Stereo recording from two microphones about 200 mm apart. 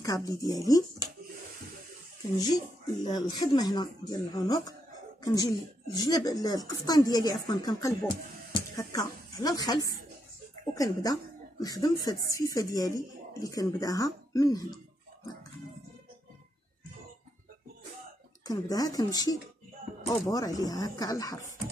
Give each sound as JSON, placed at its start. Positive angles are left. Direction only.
{"t": 0.0, "sound": "speech", "side_deg": 15}
{"t": 2.3, "sound": "a woman's voice", "side_deg": 20}
{"t": 18.4, "sound": "speech", "side_deg": 20}